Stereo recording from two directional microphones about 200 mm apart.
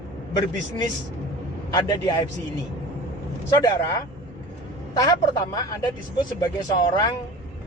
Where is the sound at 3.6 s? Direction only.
20° left (ahead or behind).